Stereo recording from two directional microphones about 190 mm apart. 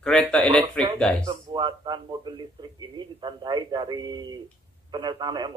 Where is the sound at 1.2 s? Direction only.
25° right (ahead or behind).